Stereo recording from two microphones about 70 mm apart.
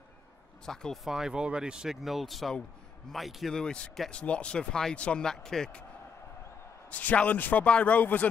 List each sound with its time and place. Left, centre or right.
0.7 s speech: centre
1.0 s a man's voice: centre
3.5 s speech: centre
6.9 s a man's voice: left